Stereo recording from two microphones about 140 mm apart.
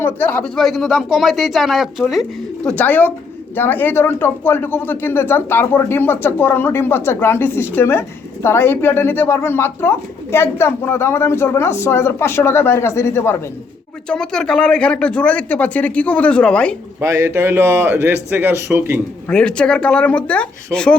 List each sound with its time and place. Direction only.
0.0 s speech: 15° left (ahead or behind); by 2.2 s 5° right (ahead or behind)
2.6 s speech: 10° left (ahead or behind)
14.1 s speech: 5° left (ahead or behind)
17.0 s a man's voice: 20° right (ahead or behind)
19.3 s speech: 5° left (ahead or behind)